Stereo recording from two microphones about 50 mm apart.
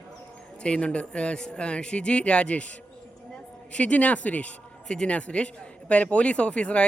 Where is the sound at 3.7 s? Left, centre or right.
Left.